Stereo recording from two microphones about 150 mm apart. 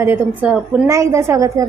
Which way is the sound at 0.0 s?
15° right (ahead or behind).